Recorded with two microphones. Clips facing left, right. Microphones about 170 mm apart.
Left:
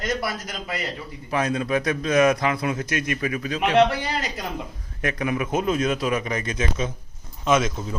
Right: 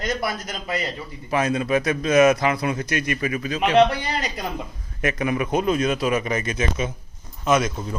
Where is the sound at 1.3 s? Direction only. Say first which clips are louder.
Right 2 dB; 5° right (ahead or behind).